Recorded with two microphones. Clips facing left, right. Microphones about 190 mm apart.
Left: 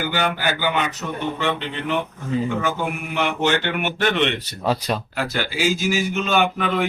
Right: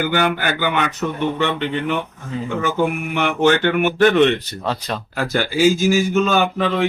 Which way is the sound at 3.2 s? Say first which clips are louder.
Right 6 dB; 50° right (ahead or behind).